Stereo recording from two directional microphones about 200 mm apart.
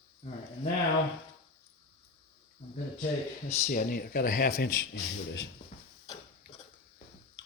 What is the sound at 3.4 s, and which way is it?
Speech, 40° left (ahead or behind).